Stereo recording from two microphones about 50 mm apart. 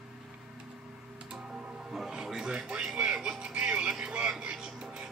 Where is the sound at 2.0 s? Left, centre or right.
Centre.